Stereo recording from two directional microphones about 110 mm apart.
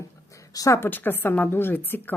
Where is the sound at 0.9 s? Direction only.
15° left (ahead or behind).